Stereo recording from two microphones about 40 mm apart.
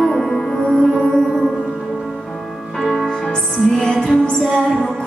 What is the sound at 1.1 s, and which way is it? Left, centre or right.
Music, centre.